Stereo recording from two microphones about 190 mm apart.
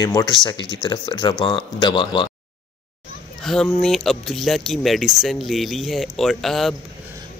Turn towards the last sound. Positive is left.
turn(degrees=0)  # may be behind; listen again after turning